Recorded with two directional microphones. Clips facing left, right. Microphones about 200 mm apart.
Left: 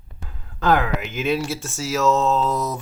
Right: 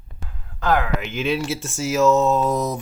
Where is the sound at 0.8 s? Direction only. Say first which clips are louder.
Even; 45° left (ahead or behind).